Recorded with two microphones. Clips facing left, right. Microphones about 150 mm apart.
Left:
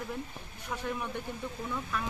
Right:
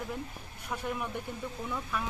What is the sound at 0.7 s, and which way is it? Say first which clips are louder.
Speech: right 1 dB; 5° right (ahead or behind).